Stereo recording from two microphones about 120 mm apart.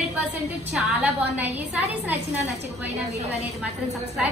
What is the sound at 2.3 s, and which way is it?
Speech, 70° right (ahead or behind).